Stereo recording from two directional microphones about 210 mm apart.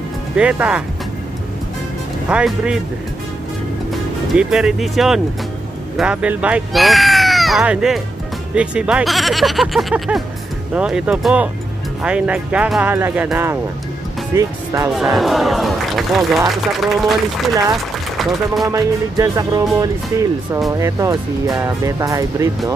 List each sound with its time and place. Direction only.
0.4 s a man's voice: 5° right (ahead or behind)
2.2 s a man's voice: 5° right (ahead or behind)
3.9 s a man's voice: centre (ahead or behind)
15.1 s a man's voice: centre (ahead or behind)
18.7 s speech: 15° right (ahead or behind)